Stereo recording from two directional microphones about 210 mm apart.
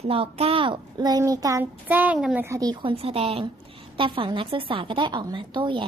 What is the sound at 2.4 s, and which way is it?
A woman's voice, 15° right (ahead or behind).